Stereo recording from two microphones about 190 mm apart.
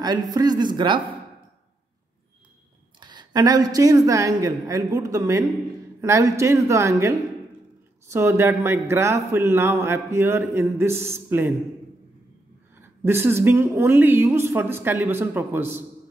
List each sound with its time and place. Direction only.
0.0 s speech: 20° right (ahead or behind)
3.0 s a man's voice: 25° right (ahead or behind)
12.8 s a man's voice: 10° right (ahead or behind)